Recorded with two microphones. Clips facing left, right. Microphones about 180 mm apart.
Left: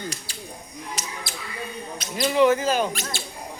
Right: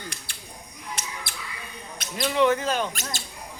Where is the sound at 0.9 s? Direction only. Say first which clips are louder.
Left 2 dB; 55° right (ahead or behind).